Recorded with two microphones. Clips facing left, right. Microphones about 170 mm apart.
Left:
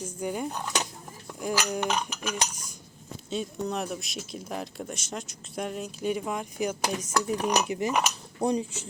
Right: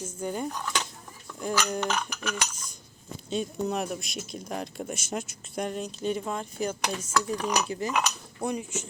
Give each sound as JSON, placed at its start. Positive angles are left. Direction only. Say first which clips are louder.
{"t": 0.0, "sound": "speech", "louder": "left 1 dB", "side_deg": 10}
{"t": 0.4, "sound": "cutlery", "louder": "left 1 dB", "side_deg": 25}
{"t": 1.4, "sound": "speech", "louder": "even", "side_deg": 10}
{"t": 3.2, "sound": "speech", "louder": "right 2 dB", "side_deg": 0}
{"t": 7.6, "sound": "cutlery", "louder": "left 2 dB", "side_deg": 20}
{"t": 8.4, "sound": "speech", "louder": "left 4 dB", "side_deg": 30}